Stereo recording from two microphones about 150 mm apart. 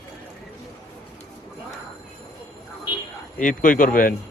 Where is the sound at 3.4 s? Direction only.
65° left (ahead or behind).